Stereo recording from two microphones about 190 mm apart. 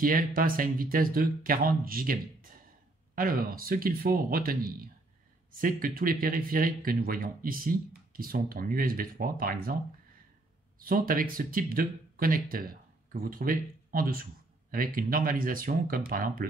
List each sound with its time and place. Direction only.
0.0 s speech: 50° right (ahead or behind)
10.8 s speech: 50° right (ahead or behind)